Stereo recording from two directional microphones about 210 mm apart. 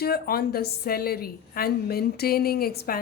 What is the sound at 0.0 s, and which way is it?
A woman's voice, 45° left (ahead or behind).